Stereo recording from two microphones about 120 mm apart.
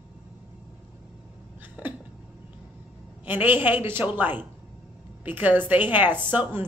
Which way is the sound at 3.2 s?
15° right (ahead or behind).